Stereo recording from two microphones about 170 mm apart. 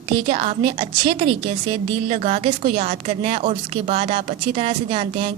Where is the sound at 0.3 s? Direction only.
35° right (ahead or behind).